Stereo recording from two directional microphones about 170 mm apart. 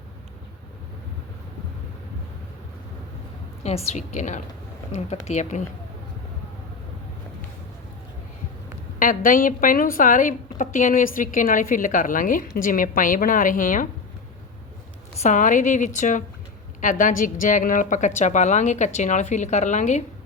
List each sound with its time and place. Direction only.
3.6 s a woman's voice: 40° left (ahead or behind)
9.0 s a woman's voice: 55° left (ahead or behind)
15.2 s a woman's voice: 50° left (ahead or behind)